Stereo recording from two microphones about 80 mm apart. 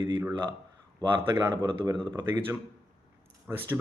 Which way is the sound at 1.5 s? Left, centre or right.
Right.